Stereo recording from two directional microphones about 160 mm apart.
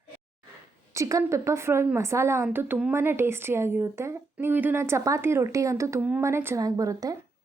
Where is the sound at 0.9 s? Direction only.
20° right (ahead or behind).